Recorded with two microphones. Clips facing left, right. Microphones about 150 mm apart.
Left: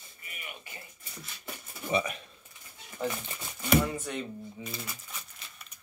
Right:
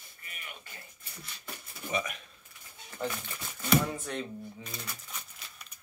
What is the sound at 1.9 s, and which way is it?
Speech, 30° left (ahead or behind).